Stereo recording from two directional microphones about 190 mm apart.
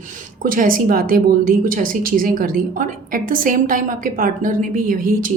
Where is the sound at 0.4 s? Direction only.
45° right (ahead or behind).